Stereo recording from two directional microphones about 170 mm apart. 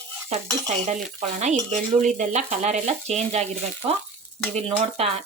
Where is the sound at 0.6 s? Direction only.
45° right (ahead or behind).